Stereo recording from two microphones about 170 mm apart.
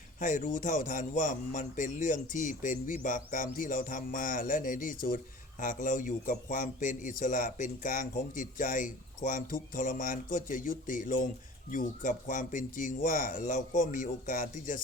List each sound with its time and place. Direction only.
0.2 s speech: 50° left (ahead or behind)